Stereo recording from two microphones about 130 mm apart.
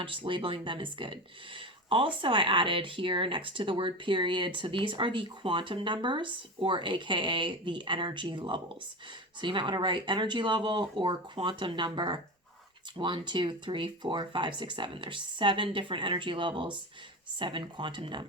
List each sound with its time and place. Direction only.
0.0 s speech: 40° right (ahead or behind)